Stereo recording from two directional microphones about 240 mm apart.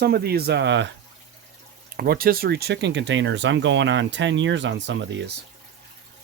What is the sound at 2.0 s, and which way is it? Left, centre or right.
Speech, right.